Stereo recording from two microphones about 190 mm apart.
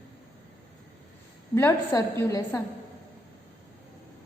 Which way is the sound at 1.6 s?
15° left (ahead or behind).